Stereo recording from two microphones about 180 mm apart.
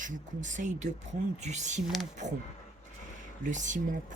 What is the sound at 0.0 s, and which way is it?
Speech, 45° right (ahead or behind).